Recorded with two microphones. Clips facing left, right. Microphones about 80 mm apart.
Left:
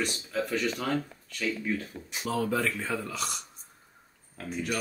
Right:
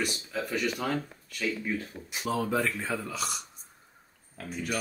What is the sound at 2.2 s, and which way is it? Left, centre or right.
Speech, right.